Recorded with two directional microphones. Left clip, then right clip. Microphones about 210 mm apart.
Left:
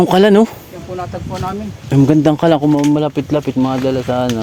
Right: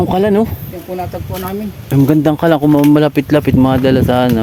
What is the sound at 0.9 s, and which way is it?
Speech, 55° right (ahead or behind).